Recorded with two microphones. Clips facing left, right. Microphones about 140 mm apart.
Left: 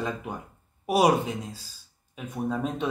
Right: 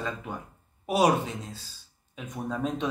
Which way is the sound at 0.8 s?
10° left (ahead or behind).